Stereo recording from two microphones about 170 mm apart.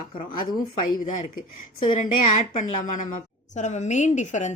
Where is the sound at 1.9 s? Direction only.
45° left (ahead or behind).